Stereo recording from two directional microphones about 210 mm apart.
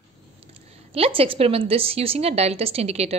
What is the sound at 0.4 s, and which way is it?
A woman's voice, 30° right (ahead or behind).